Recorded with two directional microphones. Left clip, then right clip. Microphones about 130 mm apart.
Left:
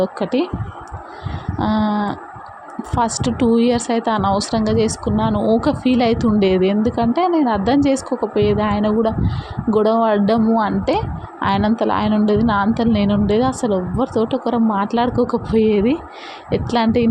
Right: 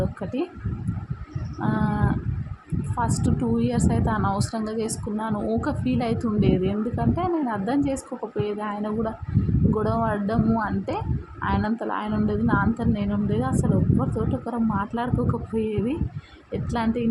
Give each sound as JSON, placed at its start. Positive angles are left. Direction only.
{"t": 0.2, "sound": "a woman's voice", "side_deg": 40}
{"t": 1.6, "sound": "a woman's voice", "side_deg": 40}